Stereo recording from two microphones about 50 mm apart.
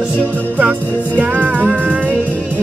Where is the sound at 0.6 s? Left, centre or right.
Right.